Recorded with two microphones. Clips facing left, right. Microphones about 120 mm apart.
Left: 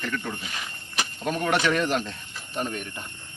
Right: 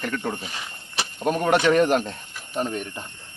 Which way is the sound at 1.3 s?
45° right (ahead or behind).